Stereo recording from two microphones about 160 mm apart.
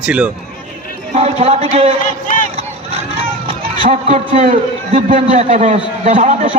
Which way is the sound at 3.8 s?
45° right (ahead or behind).